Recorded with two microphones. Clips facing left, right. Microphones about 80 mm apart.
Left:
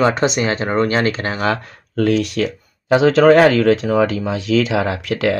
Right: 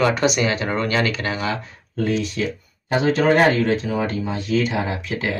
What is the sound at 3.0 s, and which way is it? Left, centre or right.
Speech, left.